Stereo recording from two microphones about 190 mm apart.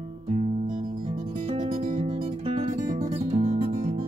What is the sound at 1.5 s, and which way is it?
Music, 35° right (ahead or behind).